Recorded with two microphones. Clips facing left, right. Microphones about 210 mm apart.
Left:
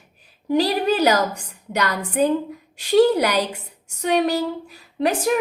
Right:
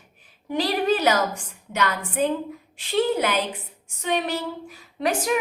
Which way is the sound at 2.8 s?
70° left (ahead or behind).